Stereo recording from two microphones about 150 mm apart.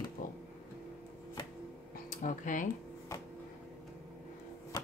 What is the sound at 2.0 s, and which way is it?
Speech, 60° left (ahead or behind).